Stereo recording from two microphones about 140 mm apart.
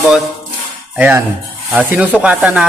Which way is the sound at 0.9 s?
10° right (ahead or behind).